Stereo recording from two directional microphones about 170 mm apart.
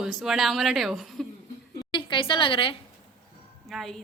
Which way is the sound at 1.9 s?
30° left (ahead or behind).